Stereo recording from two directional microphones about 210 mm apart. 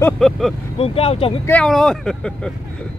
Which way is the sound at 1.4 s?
5° left (ahead or behind).